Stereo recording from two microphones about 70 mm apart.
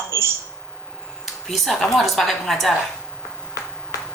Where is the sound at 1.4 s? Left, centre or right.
Centre.